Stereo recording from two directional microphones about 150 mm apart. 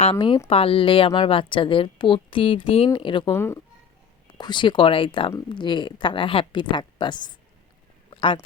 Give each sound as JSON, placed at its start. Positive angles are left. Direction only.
{"t": 0.0, "sound": "a woman's voice", "side_deg": 35}
{"t": 3.3, "sound": "speech", "side_deg": 15}
{"t": 4.4, "sound": "a woman's voice", "side_deg": 30}